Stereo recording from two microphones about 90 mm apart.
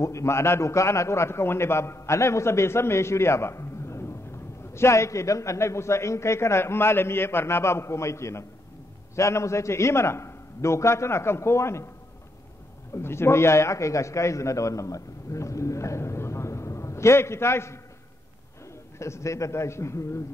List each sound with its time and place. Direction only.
0.0 s a man's voice: 35° left (ahead or behind)
12.9 s a man's voice: 30° left (ahead or behind)
18.9 s a man's voice: 30° left (ahead or behind)